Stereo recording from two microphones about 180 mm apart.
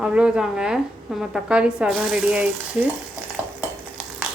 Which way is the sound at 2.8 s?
5° right (ahead or behind).